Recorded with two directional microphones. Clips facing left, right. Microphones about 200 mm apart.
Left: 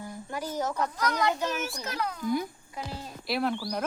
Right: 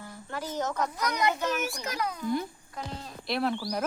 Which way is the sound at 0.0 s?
15° left (ahead or behind).